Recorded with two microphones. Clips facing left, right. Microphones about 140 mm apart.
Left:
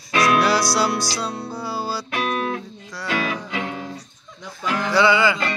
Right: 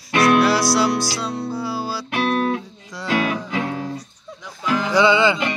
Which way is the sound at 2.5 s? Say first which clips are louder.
Right 4 dB; 20° right (ahead or behind).